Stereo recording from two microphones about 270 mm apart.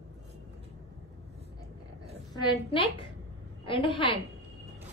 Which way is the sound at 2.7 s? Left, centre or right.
Centre.